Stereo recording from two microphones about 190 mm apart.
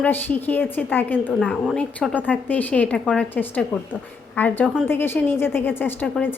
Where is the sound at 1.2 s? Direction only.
5° right (ahead or behind).